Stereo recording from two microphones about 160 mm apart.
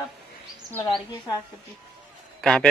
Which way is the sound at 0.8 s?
30° left (ahead or behind).